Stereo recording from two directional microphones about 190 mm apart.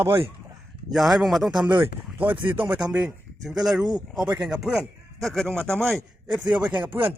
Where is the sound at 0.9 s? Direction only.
Centre (ahead or behind).